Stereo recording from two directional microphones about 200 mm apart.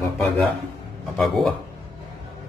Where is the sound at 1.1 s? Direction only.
Centre (ahead or behind).